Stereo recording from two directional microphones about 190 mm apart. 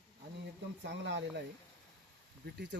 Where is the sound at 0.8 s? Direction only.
70° right (ahead or behind).